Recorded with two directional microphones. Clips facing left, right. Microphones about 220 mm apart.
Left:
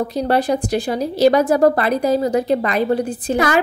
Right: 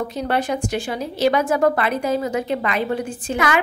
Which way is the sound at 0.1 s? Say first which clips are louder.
Left 5 dB; 35° left (ahead or behind).